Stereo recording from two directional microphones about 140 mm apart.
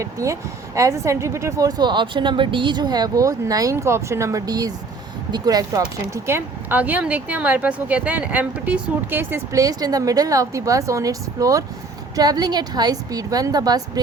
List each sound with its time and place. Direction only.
0.0 s speech: 20° right (ahead or behind)
6.2 s speech: 15° right (ahead or behind)